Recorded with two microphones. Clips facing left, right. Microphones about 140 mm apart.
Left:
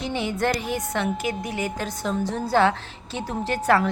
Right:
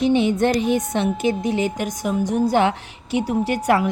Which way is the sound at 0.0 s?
20° right (ahead or behind).